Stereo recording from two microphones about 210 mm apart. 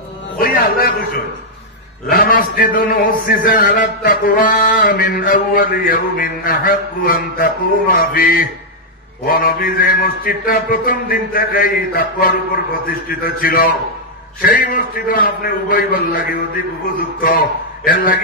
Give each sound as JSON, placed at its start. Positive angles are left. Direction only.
{"t": 0.4, "sound": "a sound", "side_deg": 45}
{"t": 2.0, "sound": "a man's voice", "side_deg": 45}
{"t": 17.2, "sound": "a man's voice", "side_deg": 45}